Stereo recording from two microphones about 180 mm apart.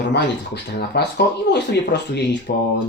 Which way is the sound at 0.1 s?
70° left (ahead or behind).